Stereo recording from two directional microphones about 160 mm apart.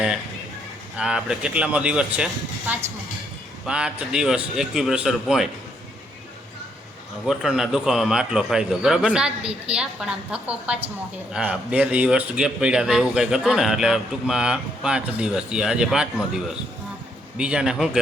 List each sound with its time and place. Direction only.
0.9 s speech: 5° right (ahead or behind)
7.3 s speech: centre (ahead or behind)